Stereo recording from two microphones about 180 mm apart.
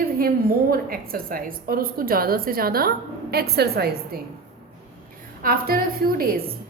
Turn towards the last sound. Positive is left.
turn(degrees=-55)  # may be behind; listen again after turning